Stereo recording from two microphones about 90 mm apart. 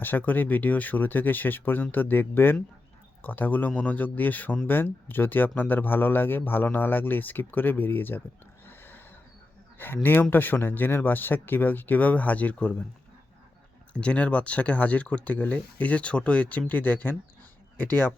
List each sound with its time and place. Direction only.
0.0 s speech: 20° left (ahead or behind)
8.6 s a sound: 25° left (ahead or behind)
9.7 s speech: 25° left (ahead or behind)
13.9 s speech: 15° left (ahead or behind)